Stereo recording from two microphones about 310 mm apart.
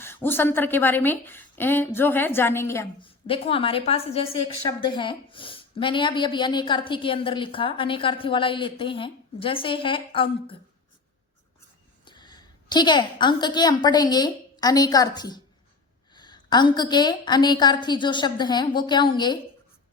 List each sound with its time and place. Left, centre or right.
0.0 s a woman's voice: centre
12.0 s a woman's voice: centre